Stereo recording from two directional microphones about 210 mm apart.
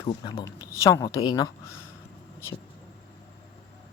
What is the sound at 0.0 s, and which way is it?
Speech, 20° left (ahead or behind).